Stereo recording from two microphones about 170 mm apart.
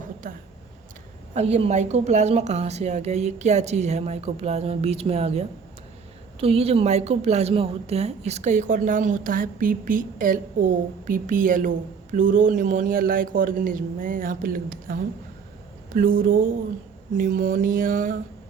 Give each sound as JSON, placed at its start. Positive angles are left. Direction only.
{"t": 1.3, "sound": "a woman's voice", "side_deg": -40}
{"t": 16.0, "sound": "speech", "side_deg": -55}